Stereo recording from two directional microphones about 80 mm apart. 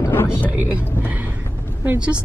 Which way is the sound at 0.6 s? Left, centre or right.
Right.